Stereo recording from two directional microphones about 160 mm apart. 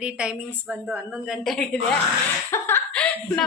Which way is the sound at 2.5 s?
10° left (ahead or behind).